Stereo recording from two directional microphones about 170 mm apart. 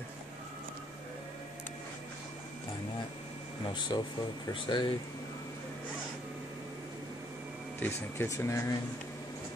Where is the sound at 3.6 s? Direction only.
25° left (ahead or behind).